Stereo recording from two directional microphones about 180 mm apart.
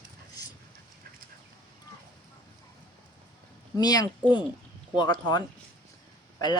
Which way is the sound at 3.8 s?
20° left (ahead or behind).